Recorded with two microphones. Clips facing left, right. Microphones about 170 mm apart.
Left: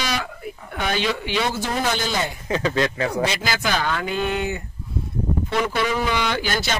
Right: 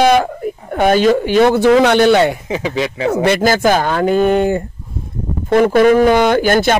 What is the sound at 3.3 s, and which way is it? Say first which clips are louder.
A man's voice: right 12 dB; 50° right (ahead or behind).